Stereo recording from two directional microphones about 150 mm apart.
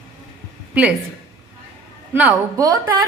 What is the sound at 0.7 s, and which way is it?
Speech, 10° right (ahead or behind).